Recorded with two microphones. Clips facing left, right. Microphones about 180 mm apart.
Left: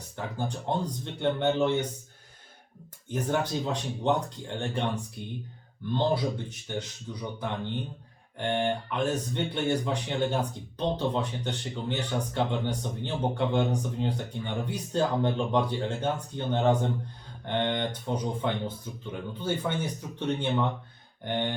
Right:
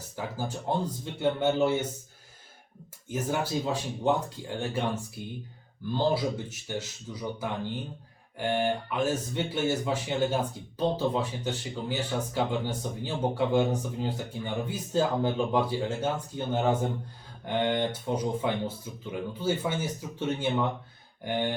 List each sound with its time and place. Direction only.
0.2 s speech: 5° right (ahead or behind)
3.1 s speech: 5° right (ahead or behind)